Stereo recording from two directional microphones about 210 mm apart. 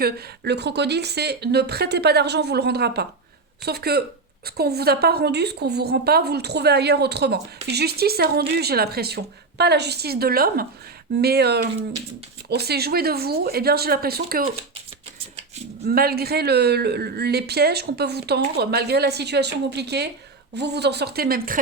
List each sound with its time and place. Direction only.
0.0 s a woman's voice: 50° right (ahead or behind)
15.9 s a woman's voice: 45° right (ahead or behind)